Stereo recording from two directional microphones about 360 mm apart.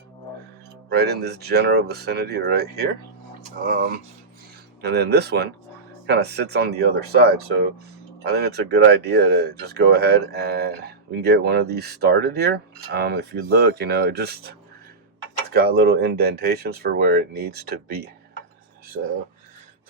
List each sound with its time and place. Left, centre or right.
0.9 s speech: right